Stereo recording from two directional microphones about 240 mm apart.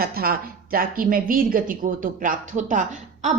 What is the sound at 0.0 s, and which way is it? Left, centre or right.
A woman's voice, right.